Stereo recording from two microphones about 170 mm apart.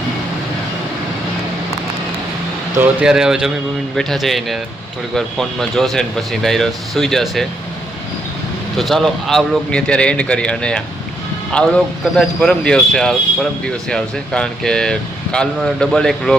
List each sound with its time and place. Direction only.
3.0 s a man's voice: 5° right (ahead or behind)
8.8 s a man's voice: centre (ahead or behind)